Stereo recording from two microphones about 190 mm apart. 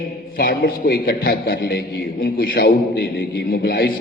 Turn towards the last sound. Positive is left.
turn(degrees=50)  # may be behind; listen again after turning